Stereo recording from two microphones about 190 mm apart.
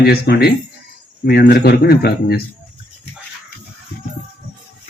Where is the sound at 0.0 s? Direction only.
55° left (ahead or behind).